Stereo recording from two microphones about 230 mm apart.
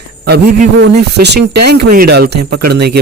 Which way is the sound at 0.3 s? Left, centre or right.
Right.